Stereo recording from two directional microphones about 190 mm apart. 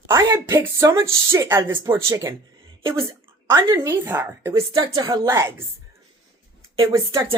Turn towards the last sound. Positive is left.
turn(degrees=-15)  # may be behind; listen again after turning